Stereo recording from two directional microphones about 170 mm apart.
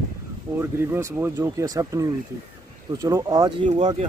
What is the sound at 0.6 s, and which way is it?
Speech, 15° right (ahead or behind).